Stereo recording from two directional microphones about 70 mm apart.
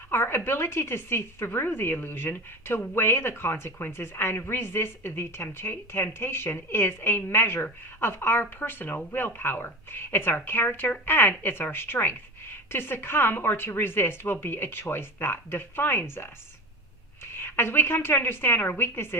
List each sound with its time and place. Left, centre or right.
0.1 s speech: left
17.4 s speech: left